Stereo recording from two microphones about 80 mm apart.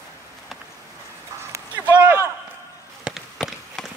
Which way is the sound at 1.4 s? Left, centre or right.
Right.